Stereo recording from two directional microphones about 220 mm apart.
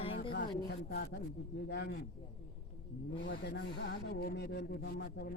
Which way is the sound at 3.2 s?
55° left (ahead or behind).